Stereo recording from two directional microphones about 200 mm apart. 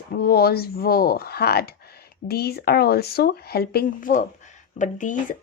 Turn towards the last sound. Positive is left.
turn(degrees=40)  # may be behind; listen again after turning